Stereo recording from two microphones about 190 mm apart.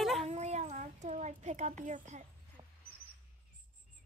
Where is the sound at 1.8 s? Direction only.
40° right (ahead or behind).